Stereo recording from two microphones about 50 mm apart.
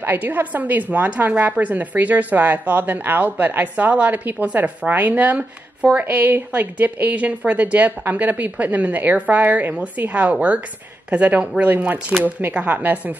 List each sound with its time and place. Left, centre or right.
0.0 s a woman's voice: right